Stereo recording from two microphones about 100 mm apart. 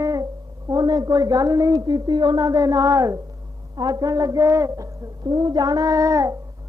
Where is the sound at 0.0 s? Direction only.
35° right (ahead or behind).